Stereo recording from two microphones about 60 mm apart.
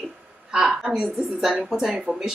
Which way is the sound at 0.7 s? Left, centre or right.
Centre.